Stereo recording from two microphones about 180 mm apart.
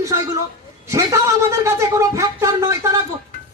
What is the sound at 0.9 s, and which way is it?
Speech, 15° right (ahead or behind).